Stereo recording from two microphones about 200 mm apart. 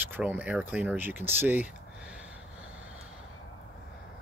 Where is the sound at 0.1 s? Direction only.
10° right (ahead or behind).